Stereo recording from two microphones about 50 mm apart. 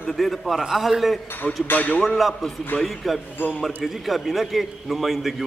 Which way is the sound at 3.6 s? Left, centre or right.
Centre.